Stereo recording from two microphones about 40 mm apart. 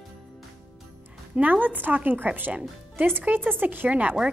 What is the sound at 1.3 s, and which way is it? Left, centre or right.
A woman's voice, right.